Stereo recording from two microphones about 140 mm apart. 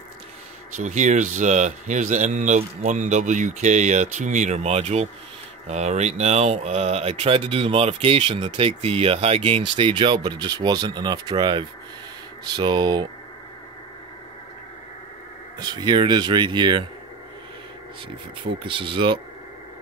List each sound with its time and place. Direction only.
0.7 s speech: 60° right (ahead or behind); by 13.1 s 30° right (ahead or behind)
15.6 s speech: 30° right (ahead or behind)
18.6 s speech: 40° right (ahead or behind)